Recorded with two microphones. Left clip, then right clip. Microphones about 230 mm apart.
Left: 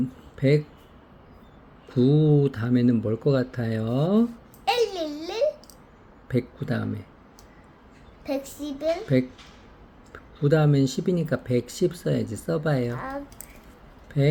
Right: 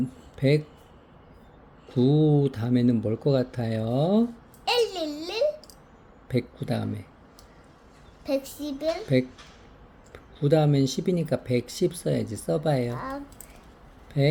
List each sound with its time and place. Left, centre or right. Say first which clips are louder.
0.3 s speech: left 1 dB; centre
1.9 s speech: left 1 dB; centre
4.6 s babbling: left 1 dB; centre
6.2 s speech: left 1 dB; centre
8.2 s speech: right 2 dB; centre